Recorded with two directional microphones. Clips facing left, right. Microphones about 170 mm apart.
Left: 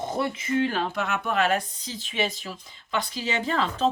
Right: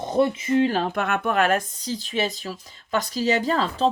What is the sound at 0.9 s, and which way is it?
Speech, 55° right (ahead or behind).